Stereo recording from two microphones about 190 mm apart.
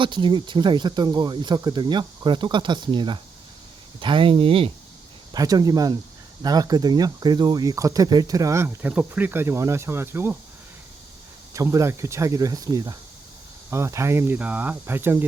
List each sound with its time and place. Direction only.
0.0 s speech: 25° right (ahead or behind)
11.5 s speech: 15° right (ahead or behind)